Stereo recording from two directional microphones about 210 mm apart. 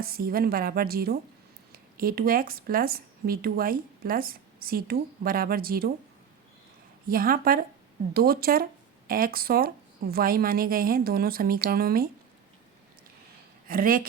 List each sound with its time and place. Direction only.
0.0 s speech: 45° right (ahead or behind)
7.1 s speech: 45° right (ahead or behind)
13.7 s speech: 45° right (ahead or behind)